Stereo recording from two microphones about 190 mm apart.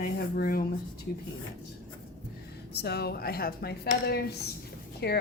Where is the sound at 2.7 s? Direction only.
60° left (ahead or behind).